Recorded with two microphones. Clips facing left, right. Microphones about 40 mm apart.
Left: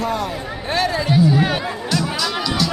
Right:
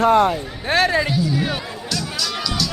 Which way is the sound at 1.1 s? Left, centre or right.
Left.